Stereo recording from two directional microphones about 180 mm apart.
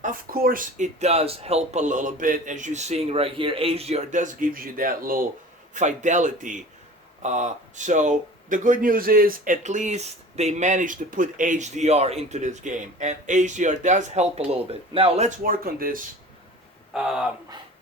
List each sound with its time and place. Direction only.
0.0 s speech: 55° right (ahead or behind); by 15.3 s 30° right (ahead or behind)
15.4 s speech: 55° right (ahead or behind)
16.9 s speech: 5° right (ahead or behind)